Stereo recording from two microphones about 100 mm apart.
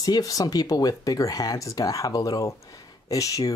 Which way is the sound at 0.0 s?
40° left (ahead or behind).